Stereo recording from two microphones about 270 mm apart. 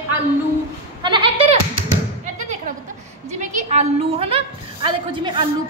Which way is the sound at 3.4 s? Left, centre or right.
Right.